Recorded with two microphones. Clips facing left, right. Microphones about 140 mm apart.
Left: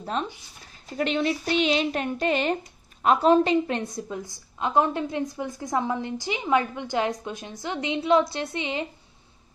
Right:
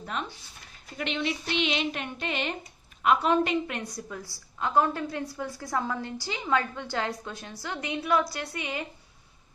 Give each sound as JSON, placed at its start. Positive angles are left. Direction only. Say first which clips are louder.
{"t": 0.0, "sound": "a woman's voice", "louder": "left 5 dB", "side_deg": 30}